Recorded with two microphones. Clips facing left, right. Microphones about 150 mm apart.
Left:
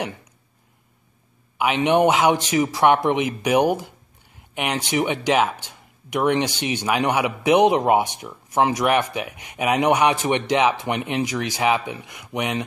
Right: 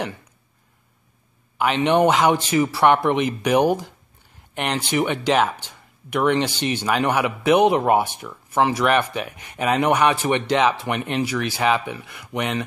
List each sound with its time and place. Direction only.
1.6 s speech: 15° left (ahead or behind)